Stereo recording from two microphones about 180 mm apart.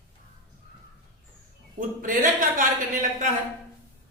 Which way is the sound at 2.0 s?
50° right (ahead or behind).